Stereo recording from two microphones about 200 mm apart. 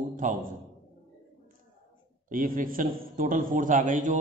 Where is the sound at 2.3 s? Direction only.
45° right (ahead or behind).